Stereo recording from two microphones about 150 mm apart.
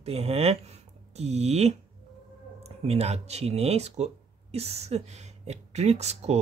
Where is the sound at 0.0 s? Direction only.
45° right (ahead or behind).